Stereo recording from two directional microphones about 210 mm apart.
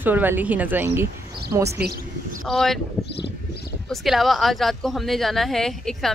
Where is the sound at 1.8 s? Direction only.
50° right (ahead or behind).